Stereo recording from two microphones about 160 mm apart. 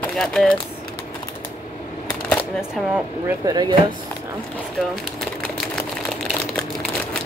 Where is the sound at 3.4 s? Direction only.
25° right (ahead or behind).